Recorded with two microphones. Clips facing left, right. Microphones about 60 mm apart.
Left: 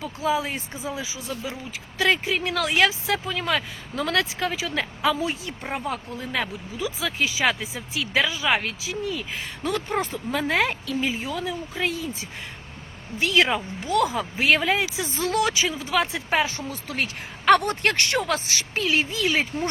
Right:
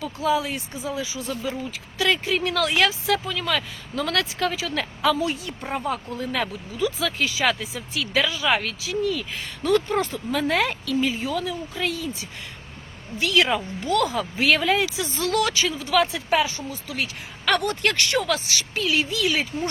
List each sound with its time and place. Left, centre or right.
0.0 s speech: left
2.2 s speech: centre
5.2 s speech: left
6.1 s speech: centre
13.1 s speech: left
13.8 s speech: centre
16.6 s speech: left
17.6 s speech: left